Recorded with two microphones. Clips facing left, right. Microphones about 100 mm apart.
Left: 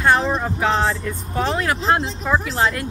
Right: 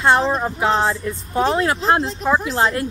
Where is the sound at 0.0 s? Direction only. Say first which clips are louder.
Right 1 dB; 25° right (ahead or behind).